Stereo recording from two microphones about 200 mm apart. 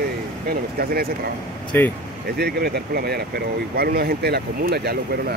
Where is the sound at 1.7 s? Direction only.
10° left (ahead or behind).